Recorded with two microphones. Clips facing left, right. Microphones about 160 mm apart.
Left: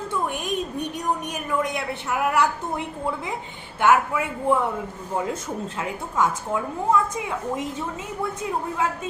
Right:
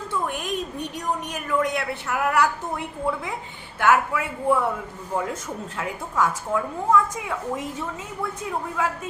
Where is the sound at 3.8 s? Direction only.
20° left (ahead or behind).